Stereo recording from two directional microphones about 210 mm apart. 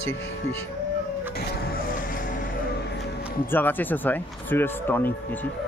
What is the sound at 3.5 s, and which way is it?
Speech, 10° left (ahead or behind).